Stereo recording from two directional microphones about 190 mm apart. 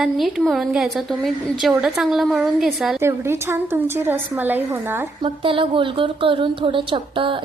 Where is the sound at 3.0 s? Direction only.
15° right (ahead or behind).